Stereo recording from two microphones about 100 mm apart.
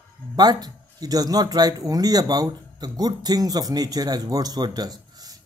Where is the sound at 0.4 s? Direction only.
40° right (ahead or behind).